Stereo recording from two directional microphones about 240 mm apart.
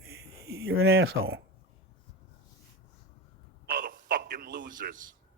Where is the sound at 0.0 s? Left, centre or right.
Right.